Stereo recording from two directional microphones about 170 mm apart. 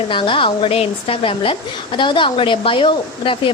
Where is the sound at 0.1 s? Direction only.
30° left (ahead or behind).